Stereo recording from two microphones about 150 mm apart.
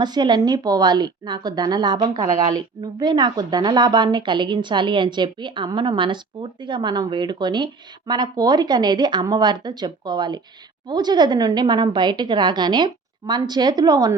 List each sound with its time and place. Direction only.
0.0 s a woman's voice: 30° right (ahead or behind)